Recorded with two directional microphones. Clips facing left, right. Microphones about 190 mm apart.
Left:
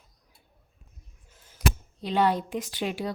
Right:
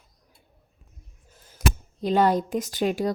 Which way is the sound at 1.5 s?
45° right (ahead or behind).